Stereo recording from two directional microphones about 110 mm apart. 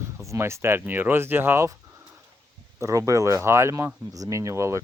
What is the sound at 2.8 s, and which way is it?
Speech, 30° right (ahead or behind).